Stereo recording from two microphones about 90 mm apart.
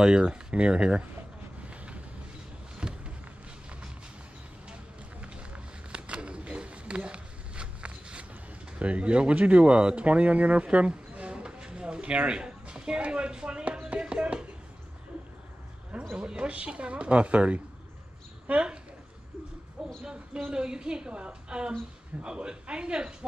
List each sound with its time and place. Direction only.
0.0 s a woman's voice: 10° right (ahead or behind)
2.8 s a sound: 10° right (ahead or behind)
5.2 s a sound: 15° right (ahead or behind)
8.7 s speech: 15° right (ahead or behind)
16.2 s a woman's voice: 10° right (ahead or behind)
20.1 s a woman's voice: 10° right (ahead or behind)